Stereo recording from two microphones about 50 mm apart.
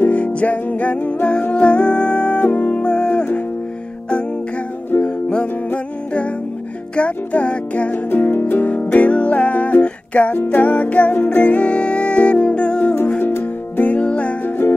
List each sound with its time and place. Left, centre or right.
0.1 s music: left
5.0 s music: left
7.0 s music: left
8.1 s music: left
10.3 s music: left
13.2 s music: left
13.7 s music: left